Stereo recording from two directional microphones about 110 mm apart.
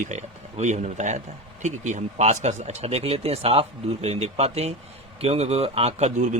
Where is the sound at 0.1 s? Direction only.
90° right.